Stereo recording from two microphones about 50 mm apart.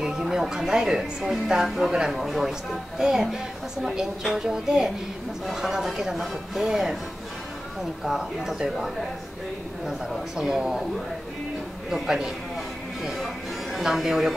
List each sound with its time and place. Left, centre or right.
0.0 s speech: centre
8.0 s speech: centre
11.9 s speech: centre